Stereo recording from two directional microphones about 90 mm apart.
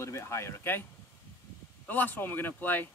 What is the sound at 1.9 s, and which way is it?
Speech, 20° left (ahead or behind).